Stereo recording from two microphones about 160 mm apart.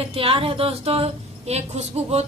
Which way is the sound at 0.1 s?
35° right (ahead or behind).